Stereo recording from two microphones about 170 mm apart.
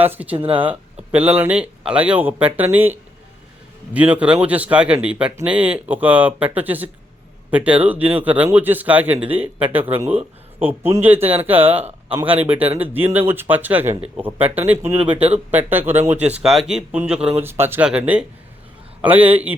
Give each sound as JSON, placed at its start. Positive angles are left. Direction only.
{"t": 0.0, "sound": "speech", "side_deg": -10}
{"t": 0.3, "sound": "speech", "side_deg": -30}
{"t": 1.1, "sound": "speech", "side_deg": -10}
{"t": 13.8, "sound": "speech", "side_deg": -35}
{"t": 14.2, "sound": "speech", "side_deg": -10}